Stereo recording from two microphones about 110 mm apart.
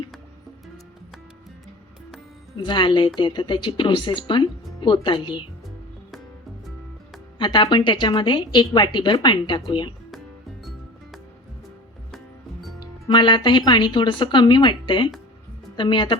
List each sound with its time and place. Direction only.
2.6 s a woman's voice: 45° left (ahead or behind)
7.3 s a woman's voice: 45° left (ahead or behind)
12.8 s a woman's voice: 45° left (ahead or behind)